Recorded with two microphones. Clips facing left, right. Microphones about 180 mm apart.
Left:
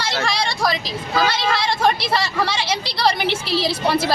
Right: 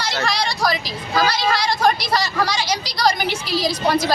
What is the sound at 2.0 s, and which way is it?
Speech, 30° left (ahead or behind).